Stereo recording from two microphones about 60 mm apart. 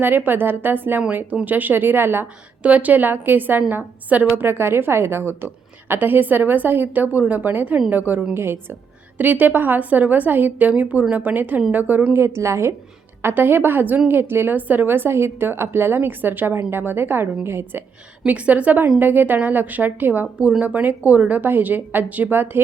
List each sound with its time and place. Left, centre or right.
0.0 s a woman's voice: right
2.6 s a woman's voice: right
4.4 s a woman's voice: right
8.3 s a woman's voice: right
9.1 s a woman's voice: right
12.1 s a woman's voice: right
13.2 s a woman's voice: right
18.3 s a woman's voice: right